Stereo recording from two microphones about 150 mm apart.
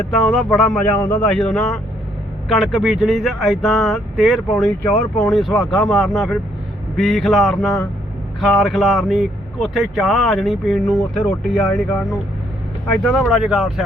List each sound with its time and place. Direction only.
0.1 s speech: centre (ahead or behind)